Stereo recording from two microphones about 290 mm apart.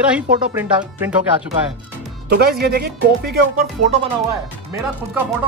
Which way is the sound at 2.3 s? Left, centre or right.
Right.